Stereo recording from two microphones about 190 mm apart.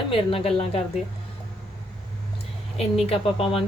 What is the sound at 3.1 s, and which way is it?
Speech, 30° left (ahead or behind).